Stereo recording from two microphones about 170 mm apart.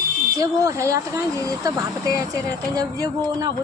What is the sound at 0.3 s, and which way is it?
Speech, 20° right (ahead or behind).